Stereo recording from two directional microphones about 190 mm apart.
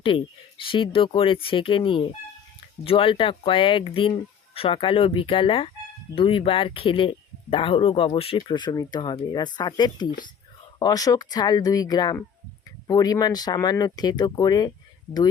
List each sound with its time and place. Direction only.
0.0 s speech: 25° left (ahead or behind)